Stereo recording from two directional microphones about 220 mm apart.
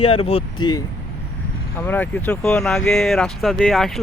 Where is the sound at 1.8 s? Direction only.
5° left (ahead or behind).